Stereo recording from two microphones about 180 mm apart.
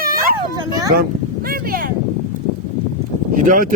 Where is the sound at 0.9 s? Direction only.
55° right (ahead or behind).